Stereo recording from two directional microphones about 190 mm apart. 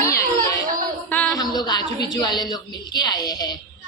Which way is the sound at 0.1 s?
15° left (ahead or behind).